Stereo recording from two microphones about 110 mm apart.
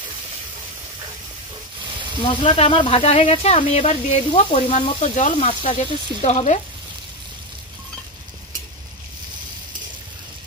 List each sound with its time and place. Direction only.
2.2 s speech: 55° left (ahead or behind); by 5.8 s 90° left
6.2 s frying: 90° left